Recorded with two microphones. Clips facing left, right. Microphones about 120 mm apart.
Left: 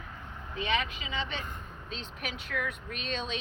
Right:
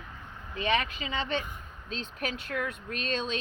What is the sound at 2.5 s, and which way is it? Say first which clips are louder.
Speech: right 1 dB; 35° right (ahead or behind).